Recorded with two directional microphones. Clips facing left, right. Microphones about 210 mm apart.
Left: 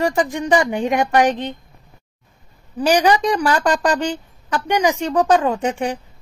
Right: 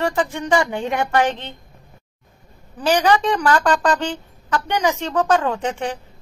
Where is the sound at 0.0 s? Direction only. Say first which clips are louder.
Left 2 dB; 15° left (ahead or behind).